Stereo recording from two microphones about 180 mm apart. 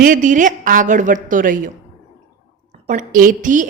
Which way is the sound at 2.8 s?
45° right (ahead or behind).